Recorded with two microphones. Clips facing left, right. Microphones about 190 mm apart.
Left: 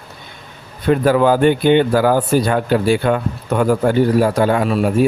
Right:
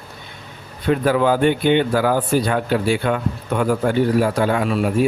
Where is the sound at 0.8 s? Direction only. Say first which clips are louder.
Left 3 dB; 40° left (ahead or behind).